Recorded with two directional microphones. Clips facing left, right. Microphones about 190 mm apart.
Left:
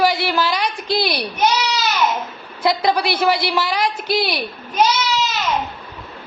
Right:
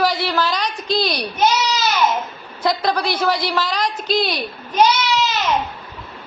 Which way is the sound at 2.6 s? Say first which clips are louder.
Left 2 dB; 10° left (ahead or behind).